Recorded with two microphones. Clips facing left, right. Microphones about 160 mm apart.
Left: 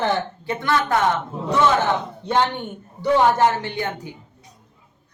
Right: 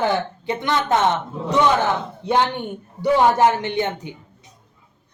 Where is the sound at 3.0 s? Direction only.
15° right (ahead or behind).